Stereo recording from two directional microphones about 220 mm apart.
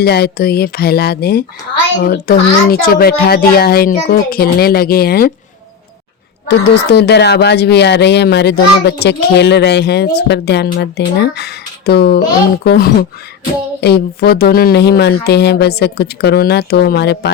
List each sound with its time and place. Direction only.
0.0 s speech: 45° left (ahead or behind)
6.5 s speech: 50° left (ahead or behind)